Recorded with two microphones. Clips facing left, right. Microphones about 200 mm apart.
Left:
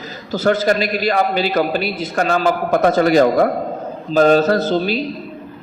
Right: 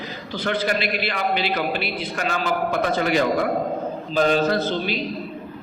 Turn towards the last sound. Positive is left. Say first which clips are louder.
# left 6 dB
turn(degrees=40)  # may be behind; listen again after turning